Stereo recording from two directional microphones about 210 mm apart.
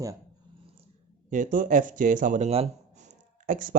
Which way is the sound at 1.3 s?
40° right (ahead or behind).